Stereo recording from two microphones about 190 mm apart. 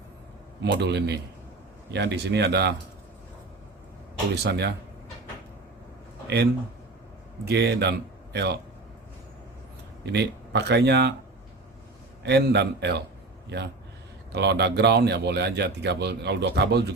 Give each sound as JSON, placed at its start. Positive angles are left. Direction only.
{"t": 0.6, "sound": "a man's voice", "side_deg": -60}
{"t": 4.4, "sound": "a man's voice", "side_deg": -60}
{"t": 6.2, "sound": "a man's voice", "side_deg": -60}
{"t": 10.1, "sound": "a man's voice", "side_deg": -60}
{"t": 12.2, "sound": "a man's voice", "side_deg": -60}
{"t": 14.3, "sound": "a man's voice", "side_deg": -65}